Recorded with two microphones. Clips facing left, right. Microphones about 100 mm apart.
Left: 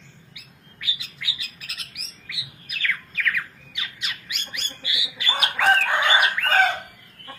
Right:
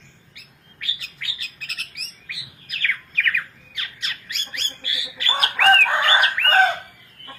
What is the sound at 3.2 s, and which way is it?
Squawk, 10° left (ahead or behind).